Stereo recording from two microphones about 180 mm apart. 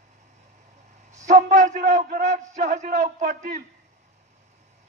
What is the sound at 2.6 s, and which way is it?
Speech, 60° right (ahead or behind).